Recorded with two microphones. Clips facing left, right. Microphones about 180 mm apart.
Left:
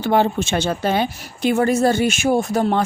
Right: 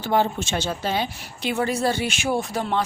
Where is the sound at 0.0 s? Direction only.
65° left (ahead or behind).